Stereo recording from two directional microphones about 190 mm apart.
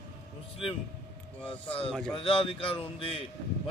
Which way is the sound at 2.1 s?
30° left (ahead or behind).